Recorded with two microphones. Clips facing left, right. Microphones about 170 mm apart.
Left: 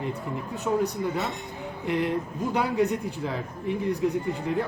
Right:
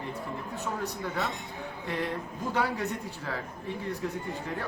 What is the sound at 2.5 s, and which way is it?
Speech, 15° left (ahead or behind).